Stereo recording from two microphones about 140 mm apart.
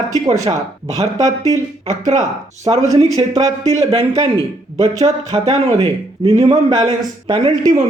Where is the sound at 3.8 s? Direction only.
45° right (ahead or behind).